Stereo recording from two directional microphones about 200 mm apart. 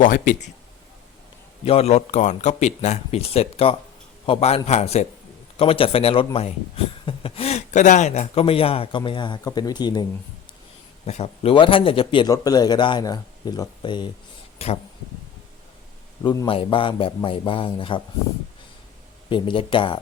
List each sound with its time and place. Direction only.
0.0 s speech: 40° left (ahead or behind)
1.6 s a man's voice: 30° left (ahead or behind)
11.0 s a man's voice: 30° left (ahead or behind)
16.2 s a man's voice: 20° left (ahead or behind)
19.3 s a man's voice: 25° left (ahead or behind)